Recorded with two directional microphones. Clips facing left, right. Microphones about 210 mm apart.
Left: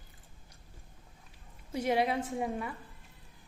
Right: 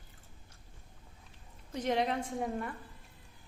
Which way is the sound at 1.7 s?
10° left (ahead or behind).